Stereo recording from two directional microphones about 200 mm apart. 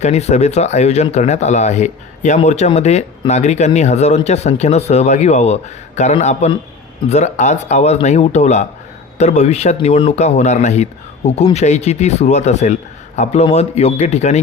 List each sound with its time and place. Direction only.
0.0 s speech: 35° left (ahead or behind)